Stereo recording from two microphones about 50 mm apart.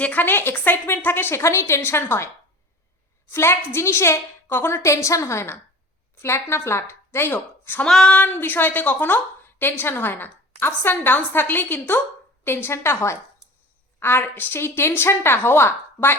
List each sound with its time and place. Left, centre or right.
0.0 s a woman's voice: left
1.4 s a woman's voice: left
3.3 s a woman's voice: left
6.2 s a woman's voice: left
7.3 s speech: left
7.9 s female singing: centre
8.3 s a woman's voice: left
9.0 s a woman's voice: left
14.0 s a woman's voice: left